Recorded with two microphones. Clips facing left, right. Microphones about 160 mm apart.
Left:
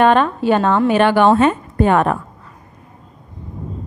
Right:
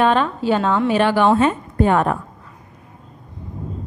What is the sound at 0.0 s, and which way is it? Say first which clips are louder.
A woman's voice: left 3 dB; 60° left (ahead or behind).